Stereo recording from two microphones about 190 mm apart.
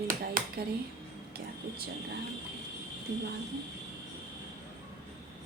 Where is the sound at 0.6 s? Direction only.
55° right (ahead or behind).